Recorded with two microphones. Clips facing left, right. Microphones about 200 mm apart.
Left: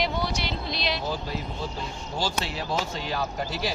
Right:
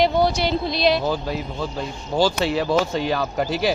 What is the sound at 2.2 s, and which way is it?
Speech, 70° right (ahead or behind).